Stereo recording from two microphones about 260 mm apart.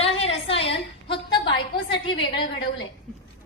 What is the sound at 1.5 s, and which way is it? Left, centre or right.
A woman's voice, left.